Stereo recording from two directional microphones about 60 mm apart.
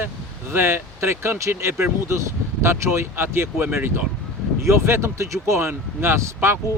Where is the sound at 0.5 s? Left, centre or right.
Right.